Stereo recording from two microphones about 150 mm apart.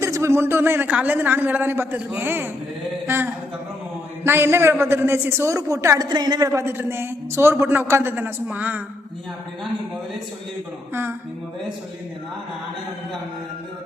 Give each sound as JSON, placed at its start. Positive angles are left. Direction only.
{"t": 0.0, "sound": "a man's voice", "side_deg": -20}
{"t": 4.2, "sound": "a man's voice", "side_deg": -15}